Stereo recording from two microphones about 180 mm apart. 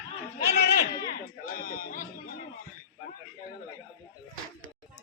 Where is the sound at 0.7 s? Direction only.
55° left (ahead or behind).